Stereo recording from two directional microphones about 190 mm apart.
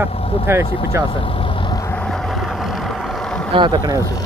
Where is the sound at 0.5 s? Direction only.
15° right (ahead or behind).